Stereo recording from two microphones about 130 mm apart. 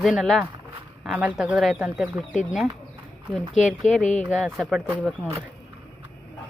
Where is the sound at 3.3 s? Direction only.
Centre (ahead or behind).